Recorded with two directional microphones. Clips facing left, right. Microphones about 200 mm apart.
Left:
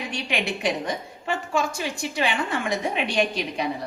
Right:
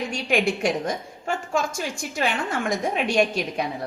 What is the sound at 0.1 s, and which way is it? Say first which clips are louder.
A woman's voice: right 5 dB; 45° right (ahead or behind).